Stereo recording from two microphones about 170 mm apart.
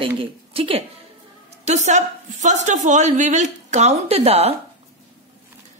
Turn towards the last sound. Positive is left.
turn(degrees=-35)  # may be behind; listen again after turning